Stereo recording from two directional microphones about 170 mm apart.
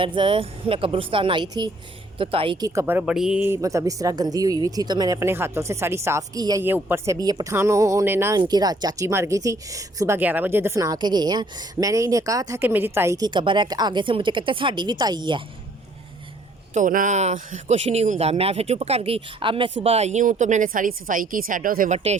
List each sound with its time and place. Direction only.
0.0 s a man's voice: 30° right (ahead or behind); by 8.4 s 15° right (ahead or behind)
8.4 s a woman's voice: 25° right (ahead or behind)
16.7 s a man's voice: 50° right (ahead or behind)
21.9 s a man's voice: 40° right (ahead or behind)